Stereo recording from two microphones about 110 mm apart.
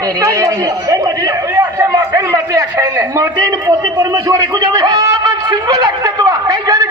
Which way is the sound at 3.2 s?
35° right (ahead or behind).